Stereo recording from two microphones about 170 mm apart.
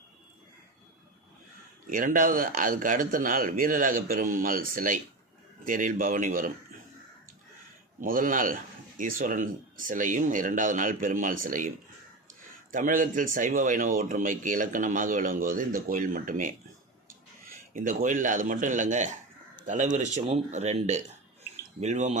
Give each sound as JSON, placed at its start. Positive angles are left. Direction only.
{"t": 1.9, "sound": "a man's voice", "side_deg": -50}
{"t": 8.0, "sound": "a man's voice", "side_deg": -55}
{"t": 12.7, "sound": "a man's voice", "side_deg": -50}